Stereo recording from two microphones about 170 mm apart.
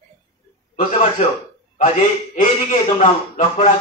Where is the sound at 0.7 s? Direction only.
45° left (ahead or behind).